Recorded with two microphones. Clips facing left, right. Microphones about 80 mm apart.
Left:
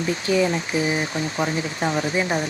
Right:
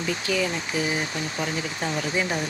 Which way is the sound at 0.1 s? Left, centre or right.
Left.